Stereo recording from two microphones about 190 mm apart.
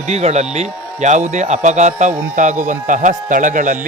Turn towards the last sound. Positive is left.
turn(degrees=-45)  # may be behind; listen again after turning